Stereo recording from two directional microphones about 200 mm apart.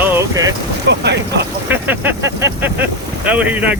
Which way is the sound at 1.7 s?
10° right (ahead or behind).